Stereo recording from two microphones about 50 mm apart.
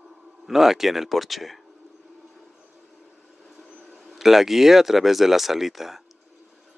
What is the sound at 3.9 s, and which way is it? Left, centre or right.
Speech, centre.